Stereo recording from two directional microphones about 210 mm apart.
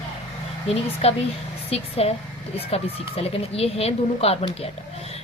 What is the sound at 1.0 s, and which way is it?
Speech, 30° left (ahead or behind).